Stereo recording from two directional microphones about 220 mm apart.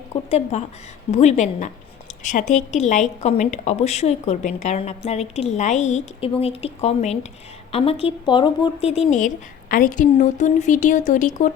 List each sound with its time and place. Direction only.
0.3 s a woman's voice: 30° left (ahead or behind)